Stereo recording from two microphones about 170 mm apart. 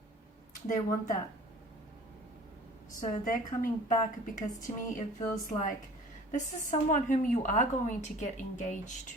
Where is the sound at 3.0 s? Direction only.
50° left (ahead or behind).